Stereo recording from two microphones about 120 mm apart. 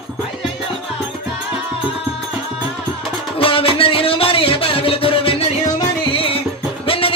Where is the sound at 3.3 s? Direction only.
50° left (ahead or behind).